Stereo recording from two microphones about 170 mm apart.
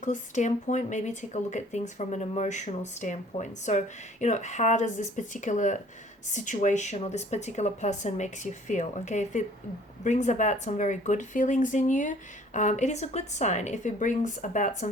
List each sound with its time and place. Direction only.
0.0 s speech: 45° left (ahead or behind)